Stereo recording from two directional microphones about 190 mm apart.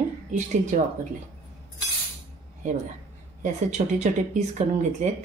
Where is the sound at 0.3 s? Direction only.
40° right (ahead or behind).